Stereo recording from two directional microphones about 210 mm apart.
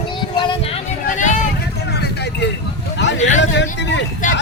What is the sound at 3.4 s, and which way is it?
Hubbub, 55° left (ahead or behind).